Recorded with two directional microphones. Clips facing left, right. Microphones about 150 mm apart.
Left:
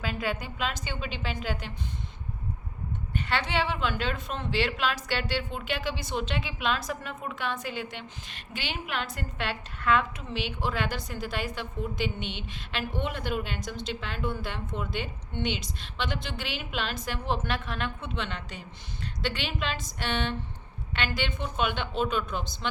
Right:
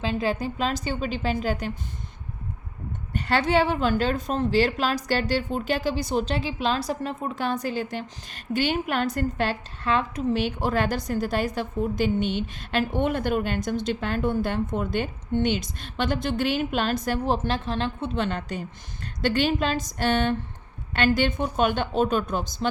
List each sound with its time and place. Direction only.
0.0 s speech: 30° right (ahead or behind)
3.1 s a woman's voice: 40° right (ahead or behind)